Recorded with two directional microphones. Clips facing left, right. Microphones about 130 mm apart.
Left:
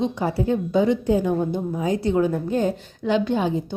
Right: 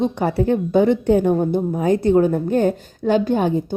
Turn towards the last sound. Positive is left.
turn(degrees=-50)  # may be behind; listen again after turning